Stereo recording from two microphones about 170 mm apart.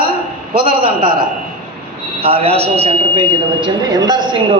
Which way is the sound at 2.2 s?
35° right (ahead or behind).